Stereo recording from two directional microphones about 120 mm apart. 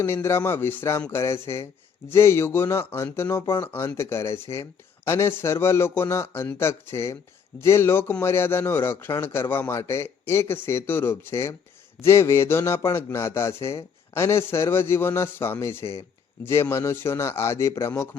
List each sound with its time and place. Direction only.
0.0 s speech: 20° left (ahead or behind)